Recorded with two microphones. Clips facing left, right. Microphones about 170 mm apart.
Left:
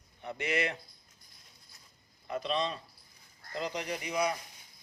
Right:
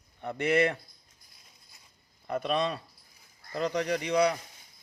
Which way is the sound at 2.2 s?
60° right (ahead or behind).